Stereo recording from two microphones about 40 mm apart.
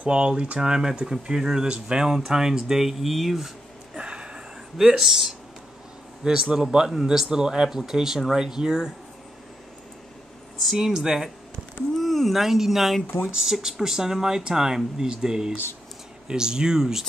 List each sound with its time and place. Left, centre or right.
0.0 s speech: right; by 3.5 s centre
3.9 s a sound: right
4.7 s speech: centre
6.2 s speech: centre
10.8 s speech: centre
11.9 s speech: centre